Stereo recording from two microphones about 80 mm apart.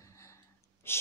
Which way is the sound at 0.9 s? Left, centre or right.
Left.